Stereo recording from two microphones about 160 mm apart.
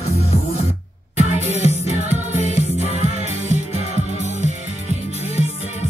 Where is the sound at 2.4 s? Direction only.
45° right (ahead or behind).